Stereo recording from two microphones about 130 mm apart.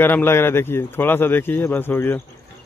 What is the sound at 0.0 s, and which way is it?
Speech, 15° left (ahead or behind).